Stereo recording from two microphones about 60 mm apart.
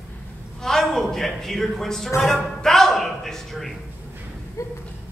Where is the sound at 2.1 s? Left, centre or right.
Centre.